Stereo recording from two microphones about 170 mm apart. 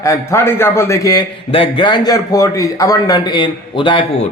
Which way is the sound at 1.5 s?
30° left (ahead or behind).